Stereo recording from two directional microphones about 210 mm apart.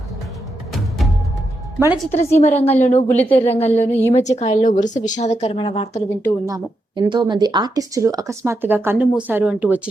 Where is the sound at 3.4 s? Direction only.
30° left (ahead or behind).